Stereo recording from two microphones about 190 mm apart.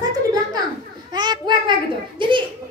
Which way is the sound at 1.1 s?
20° right (ahead or behind).